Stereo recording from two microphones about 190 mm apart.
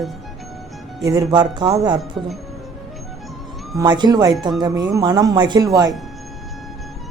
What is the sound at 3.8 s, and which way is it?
Speech, 25° right (ahead or behind).